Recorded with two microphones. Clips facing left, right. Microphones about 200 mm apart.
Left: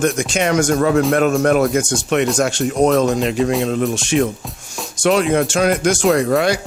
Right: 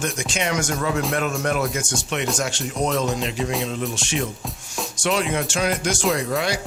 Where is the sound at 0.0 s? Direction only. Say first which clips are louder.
Left 8 dB; 55° left (ahead or behind).